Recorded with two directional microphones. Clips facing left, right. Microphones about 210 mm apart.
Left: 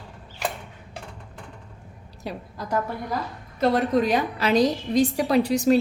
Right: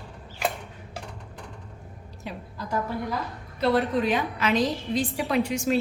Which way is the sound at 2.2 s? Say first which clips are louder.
Left 4 dB; 40° left (ahead or behind).